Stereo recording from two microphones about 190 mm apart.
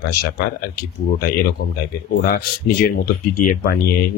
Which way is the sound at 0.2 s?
55° left (ahead or behind).